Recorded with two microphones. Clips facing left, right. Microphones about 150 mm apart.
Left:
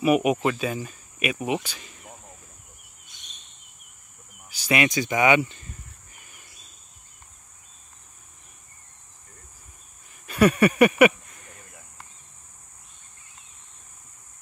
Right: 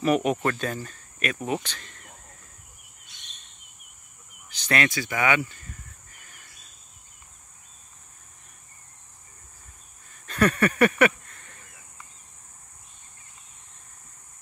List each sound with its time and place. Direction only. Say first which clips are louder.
0.0 s speech: left 2 dB; 10° left (ahead or behind)
4.5 s speech: left 2 dB; 10° left (ahead or behind)
6.1 s a sound: left 1 dB; 15° left (ahead or behind)
10.2 s speech: left 4 dB; 10° left (ahead or behind)